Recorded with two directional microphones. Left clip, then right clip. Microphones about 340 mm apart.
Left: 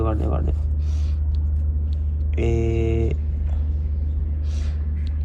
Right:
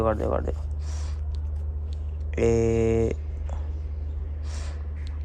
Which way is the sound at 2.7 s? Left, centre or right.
Right.